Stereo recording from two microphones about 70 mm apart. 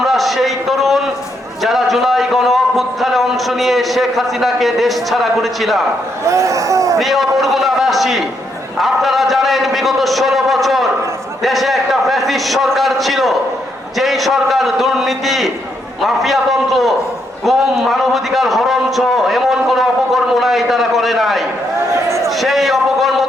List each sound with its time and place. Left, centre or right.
0.0 s a man's voice: centre
6.2 s speech: right
7.0 s a man's voice: centre
17.4 s a sound: centre